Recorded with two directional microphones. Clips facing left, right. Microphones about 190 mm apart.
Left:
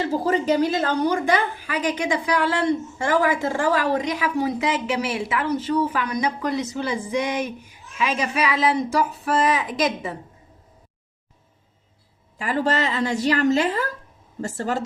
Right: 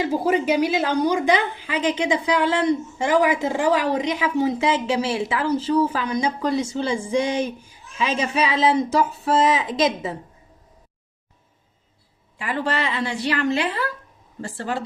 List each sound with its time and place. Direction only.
0.0 s a woman's voice: 15° right (ahead or behind)
12.4 s a woman's voice: 40° left (ahead or behind)